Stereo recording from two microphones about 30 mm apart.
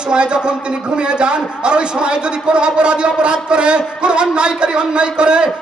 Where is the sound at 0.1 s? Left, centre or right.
Right.